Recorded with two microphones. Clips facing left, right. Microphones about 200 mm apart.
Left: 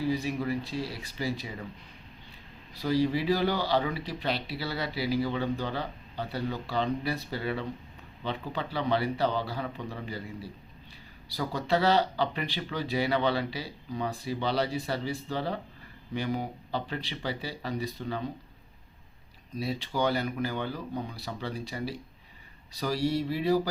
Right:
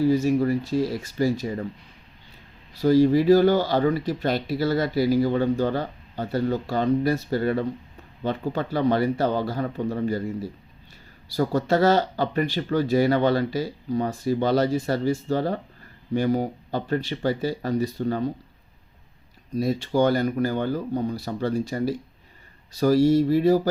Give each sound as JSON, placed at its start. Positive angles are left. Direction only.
{"t": 0.0, "sound": "speech", "side_deg": -45}
{"t": 2.8, "sound": "speech", "side_deg": -45}
{"t": 19.5, "sound": "speech", "side_deg": -45}